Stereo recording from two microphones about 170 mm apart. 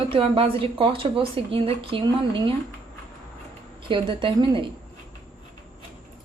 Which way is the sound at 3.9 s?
30° right (ahead or behind).